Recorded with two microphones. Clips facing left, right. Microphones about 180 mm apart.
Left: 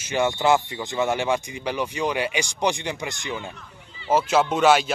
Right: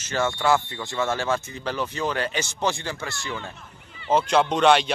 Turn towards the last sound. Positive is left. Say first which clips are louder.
# even
turn(degrees=5)  # may be behind; listen again after turning